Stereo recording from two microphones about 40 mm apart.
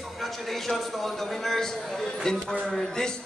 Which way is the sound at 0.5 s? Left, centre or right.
Centre.